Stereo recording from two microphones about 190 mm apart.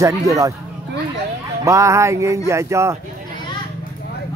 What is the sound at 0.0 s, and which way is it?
Speech, 15° right (ahead or behind).